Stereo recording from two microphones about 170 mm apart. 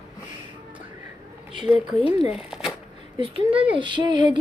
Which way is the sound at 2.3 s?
5° right (ahead or behind).